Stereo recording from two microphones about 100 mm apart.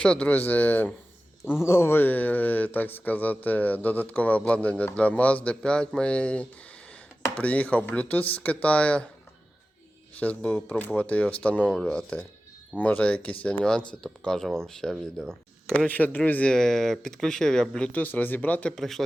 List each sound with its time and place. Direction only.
0.0 s speech: 10° left (ahead or behind)
10.2 s speech: 15° left (ahead or behind)
18.8 s speech: centre (ahead or behind)